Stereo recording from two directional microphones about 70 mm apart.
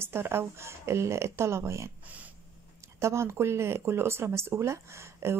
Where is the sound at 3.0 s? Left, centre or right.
Right.